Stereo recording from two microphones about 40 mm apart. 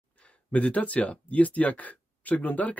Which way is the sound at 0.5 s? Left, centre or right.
Left.